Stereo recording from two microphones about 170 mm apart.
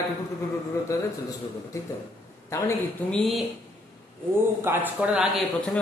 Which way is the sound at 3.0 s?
Centre (ahead or behind).